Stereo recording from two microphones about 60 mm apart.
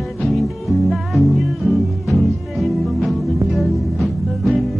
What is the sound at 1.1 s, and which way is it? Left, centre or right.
Music, centre.